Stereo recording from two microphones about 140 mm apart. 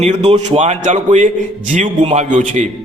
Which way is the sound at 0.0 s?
50° right (ahead or behind).